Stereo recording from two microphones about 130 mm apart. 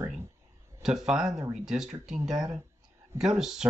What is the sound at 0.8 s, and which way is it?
Speech, 5° right (ahead or behind).